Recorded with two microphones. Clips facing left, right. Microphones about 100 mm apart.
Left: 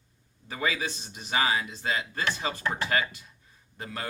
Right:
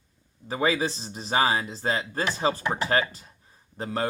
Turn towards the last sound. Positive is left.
turn(degrees=-30)  # may be behind; listen again after turning